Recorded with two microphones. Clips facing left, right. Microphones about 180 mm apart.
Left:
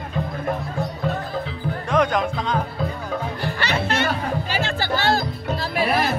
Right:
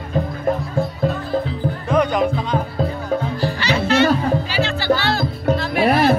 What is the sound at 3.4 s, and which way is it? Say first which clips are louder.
Music: right 4 dB; 55° left (ahead or behind).